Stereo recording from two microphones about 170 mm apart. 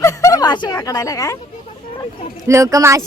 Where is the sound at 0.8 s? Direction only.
20° left (ahead or behind).